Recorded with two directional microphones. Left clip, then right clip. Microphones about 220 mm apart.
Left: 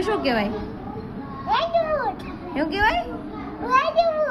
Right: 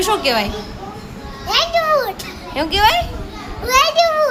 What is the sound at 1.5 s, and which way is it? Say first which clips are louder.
Children playing: right 6 dB; 30° right (ahead or behind).